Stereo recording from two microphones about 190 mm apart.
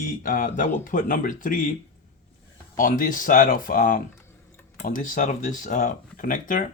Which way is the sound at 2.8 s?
45° left (ahead or behind).